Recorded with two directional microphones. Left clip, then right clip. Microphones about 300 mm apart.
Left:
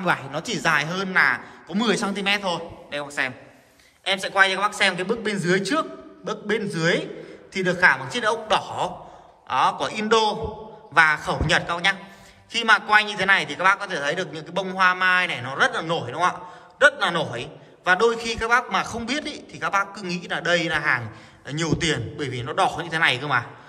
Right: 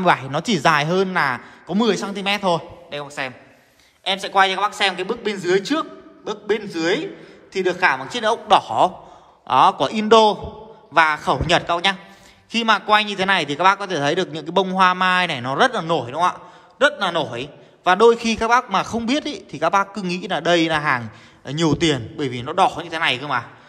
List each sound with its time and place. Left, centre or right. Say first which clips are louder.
0.0 s a man's voice: right 6 dB; right